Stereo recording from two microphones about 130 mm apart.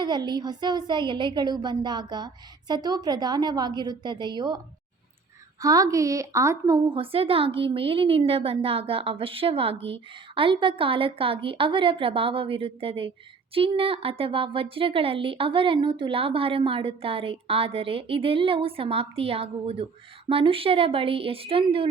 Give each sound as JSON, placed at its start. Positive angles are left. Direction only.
{"t": 0.0, "sound": "a woman's voice", "side_deg": -35}
{"t": 5.6, "sound": "a woman's voice", "side_deg": -25}
{"t": 6.9, "sound": "a woman's voice", "side_deg": -45}